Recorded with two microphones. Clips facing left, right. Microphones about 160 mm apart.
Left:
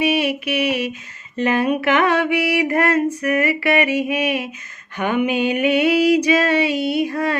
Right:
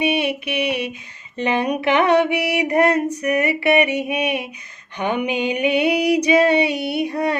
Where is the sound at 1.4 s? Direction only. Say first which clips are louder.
Left 2 dB; 20° right (ahead or behind).